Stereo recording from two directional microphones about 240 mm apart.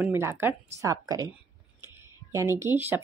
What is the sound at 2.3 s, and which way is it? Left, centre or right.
Speech, centre.